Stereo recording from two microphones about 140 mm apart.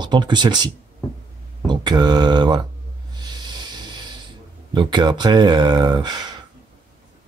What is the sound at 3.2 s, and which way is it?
Music, 30° right (ahead or behind).